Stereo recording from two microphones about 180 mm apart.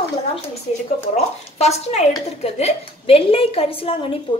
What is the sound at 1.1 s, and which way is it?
A woman's voice, 35° left (ahead or behind).